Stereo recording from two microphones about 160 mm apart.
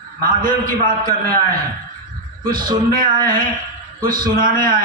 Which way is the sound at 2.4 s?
60° right (ahead or behind).